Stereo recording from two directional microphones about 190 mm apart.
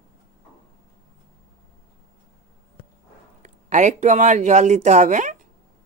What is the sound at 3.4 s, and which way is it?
Speech, 40° right (ahead or behind).